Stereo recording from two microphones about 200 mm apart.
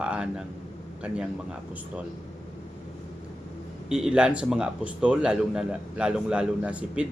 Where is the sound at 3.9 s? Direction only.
5° right (ahead or behind).